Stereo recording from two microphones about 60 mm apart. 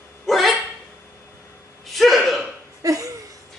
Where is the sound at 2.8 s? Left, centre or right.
Right.